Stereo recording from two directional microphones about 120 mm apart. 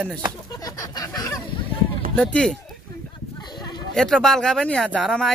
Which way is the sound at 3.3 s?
35° left (ahead or behind).